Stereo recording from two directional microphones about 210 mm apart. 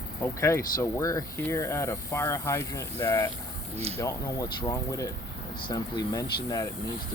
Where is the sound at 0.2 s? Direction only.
15° left (ahead or behind).